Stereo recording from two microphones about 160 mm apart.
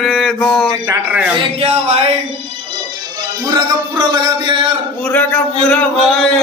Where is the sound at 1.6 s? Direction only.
35° right (ahead or behind).